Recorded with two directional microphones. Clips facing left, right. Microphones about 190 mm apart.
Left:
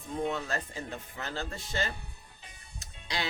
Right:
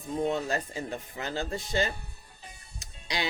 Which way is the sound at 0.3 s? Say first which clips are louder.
Right 4 dB; 20° right (ahead or behind).